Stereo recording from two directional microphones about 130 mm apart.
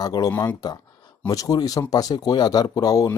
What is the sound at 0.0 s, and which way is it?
Speech, 30° left (ahead or behind).